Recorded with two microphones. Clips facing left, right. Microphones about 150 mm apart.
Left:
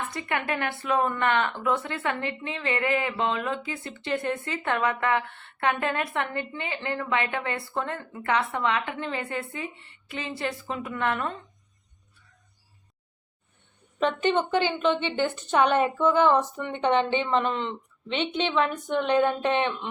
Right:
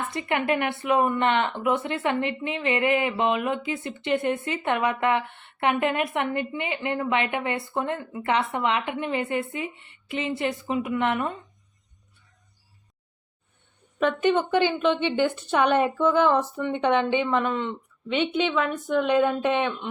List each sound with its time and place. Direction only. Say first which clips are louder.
0.1 s a woman's voice: right 4 dB; 20° right (ahead or behind)
14.0 s a woman's voice: right 2 dB; 10° right (ahead or behind)